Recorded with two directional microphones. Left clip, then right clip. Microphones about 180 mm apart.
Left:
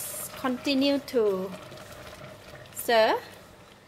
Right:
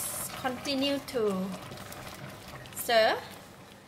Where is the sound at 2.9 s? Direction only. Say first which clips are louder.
Left 2 dB; 45° left (ahead or behind).